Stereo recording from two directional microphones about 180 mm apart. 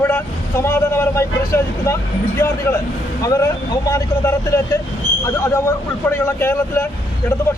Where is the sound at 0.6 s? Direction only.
15° left (ahead or behind).